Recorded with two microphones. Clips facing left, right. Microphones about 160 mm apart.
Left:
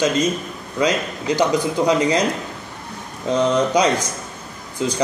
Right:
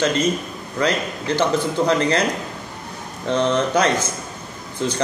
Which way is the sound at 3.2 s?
10° left (ahead or behind).